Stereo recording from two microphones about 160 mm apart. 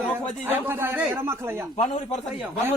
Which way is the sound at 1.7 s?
45° left (ahead or behind).